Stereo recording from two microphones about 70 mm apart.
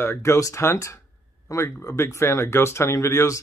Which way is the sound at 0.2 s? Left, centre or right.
Left.